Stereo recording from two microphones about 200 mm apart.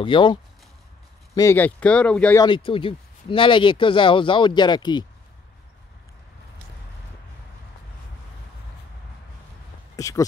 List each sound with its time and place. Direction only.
0.0 s speech: 25° left (ahead or behind)
1.3 s speech: 15° left (ahead or behind)
2.4 s speech: 25° left (ahead or behind)
9.9 s speech: 15° left (ahead or behind)